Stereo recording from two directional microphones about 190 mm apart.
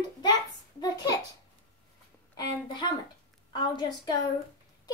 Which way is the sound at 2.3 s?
20° left (ahead or behind).